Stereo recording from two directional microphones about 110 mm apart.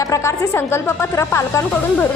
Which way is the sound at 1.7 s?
15° left (ahead or behind).